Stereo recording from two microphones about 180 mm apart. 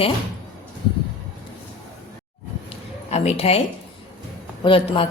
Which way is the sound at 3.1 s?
35° left (ahead or behind).